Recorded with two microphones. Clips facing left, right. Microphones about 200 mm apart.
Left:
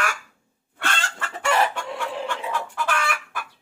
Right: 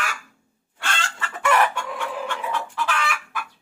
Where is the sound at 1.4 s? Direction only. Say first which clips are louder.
Right 2 dB; 25° left (ahead or behind).